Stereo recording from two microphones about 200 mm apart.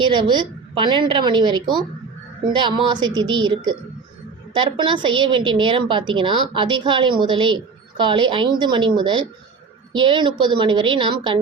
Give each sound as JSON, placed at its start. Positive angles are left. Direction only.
{"t": 0.0, "sound": "a woman's voice", "side_deg": -25}